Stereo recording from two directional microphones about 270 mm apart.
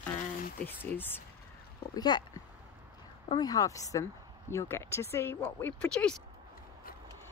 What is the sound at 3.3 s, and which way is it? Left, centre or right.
A woman's voice, centre.